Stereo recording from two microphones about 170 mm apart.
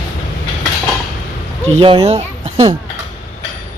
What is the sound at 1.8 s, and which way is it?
Speech, 35° right (ahead or behind).